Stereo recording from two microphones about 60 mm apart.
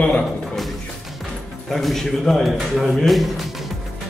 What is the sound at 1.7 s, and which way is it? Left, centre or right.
A man's voice, centre.